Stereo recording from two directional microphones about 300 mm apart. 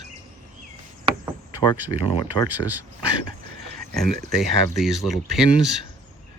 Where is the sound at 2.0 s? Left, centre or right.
Centre.